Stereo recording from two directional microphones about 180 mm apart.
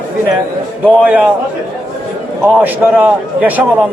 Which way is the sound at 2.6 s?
10° right (ahead or behind).